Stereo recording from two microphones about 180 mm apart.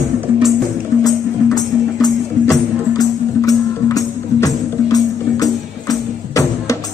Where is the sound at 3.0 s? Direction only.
20° left (ahead or behind).